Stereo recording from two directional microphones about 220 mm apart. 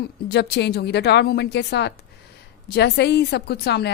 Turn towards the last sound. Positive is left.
turn(degrees=50)  # may be behind; listen again after turning